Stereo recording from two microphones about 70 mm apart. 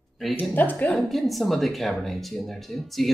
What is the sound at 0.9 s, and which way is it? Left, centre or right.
Speech, centre.